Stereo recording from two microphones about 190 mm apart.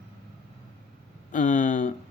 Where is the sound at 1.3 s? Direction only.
45° left (ahead or behind).